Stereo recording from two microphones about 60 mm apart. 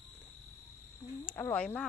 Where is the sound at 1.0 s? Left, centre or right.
Left.